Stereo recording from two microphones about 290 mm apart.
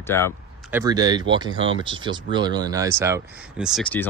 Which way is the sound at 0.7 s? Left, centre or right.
Centre.